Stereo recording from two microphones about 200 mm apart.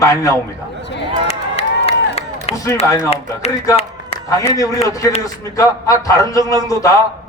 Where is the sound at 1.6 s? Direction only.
30° left (ahead or behind).